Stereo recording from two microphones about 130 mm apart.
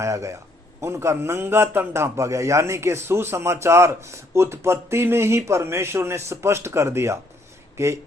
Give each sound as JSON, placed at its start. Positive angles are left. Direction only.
{"t": 0.0, "sound": "a man's voice", "side_deg": -25}